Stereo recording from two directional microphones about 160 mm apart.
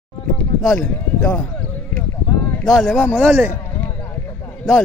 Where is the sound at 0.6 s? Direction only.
5° left (ahead or behind).